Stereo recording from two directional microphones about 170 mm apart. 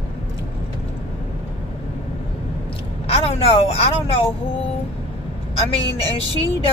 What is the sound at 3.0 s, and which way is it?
Speech, 35° left (ahead or behind).